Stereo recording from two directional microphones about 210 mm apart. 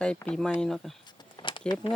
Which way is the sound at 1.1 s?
20° left (ahead or behind).